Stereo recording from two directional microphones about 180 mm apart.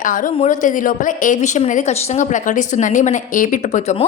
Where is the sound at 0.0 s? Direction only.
50° left (ahead or behind).